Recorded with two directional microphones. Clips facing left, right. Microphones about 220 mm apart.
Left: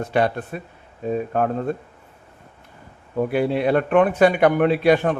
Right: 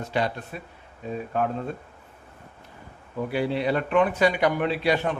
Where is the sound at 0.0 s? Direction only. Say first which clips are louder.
Left 6 dB; 55° left (ahead or behind).